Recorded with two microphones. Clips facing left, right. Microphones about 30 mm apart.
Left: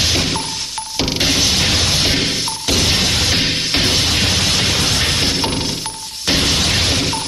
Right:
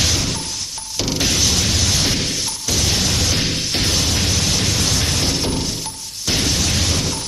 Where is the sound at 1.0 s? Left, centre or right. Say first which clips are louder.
Left 3 dB; left.